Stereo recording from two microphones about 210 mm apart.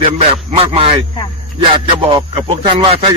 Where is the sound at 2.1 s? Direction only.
25° right (ahead or behind).